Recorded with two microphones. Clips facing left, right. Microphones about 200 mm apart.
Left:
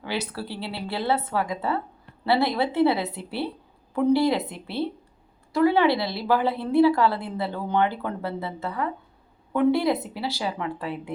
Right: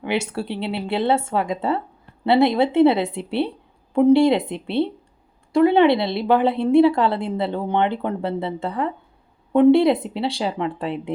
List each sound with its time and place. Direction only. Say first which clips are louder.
0.0 s a woman's voice: right 6 dB; 25° right (ahead or behind)